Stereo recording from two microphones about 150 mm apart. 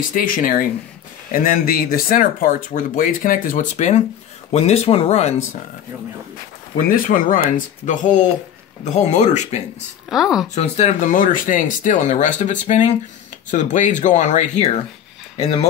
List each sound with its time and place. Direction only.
0.1 s speech: 70° left (ahead or behind); by 5.3 s 45° left (ahead or behind)
7.1 s speech: 60° left (ahead or behind)
10.0 s speech: centre (ahead or behind)
10.5 s speech: 45° left (ahead or behind)